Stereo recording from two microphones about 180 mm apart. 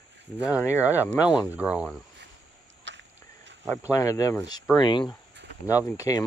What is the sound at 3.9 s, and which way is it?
Speech, 20° left (ahead or behind).